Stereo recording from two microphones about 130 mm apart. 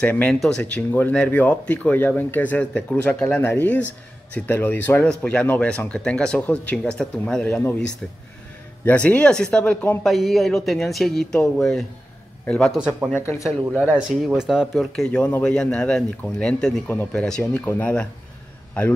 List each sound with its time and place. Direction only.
0.0 s speech: 10° left (ahead or behind)
12.7 s speech: 10° right (ahead or behind)
13.1 s speech: 15° left (ahead or behind)
13.4 s speech: 10° right (ahead or behind); by 18.0 s 15° left (ahead or behind)